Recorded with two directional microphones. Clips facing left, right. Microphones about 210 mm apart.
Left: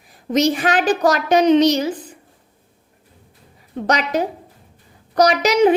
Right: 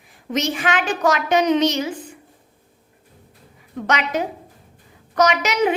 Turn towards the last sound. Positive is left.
turn(degrees=35)  # may be behind; listen again after turning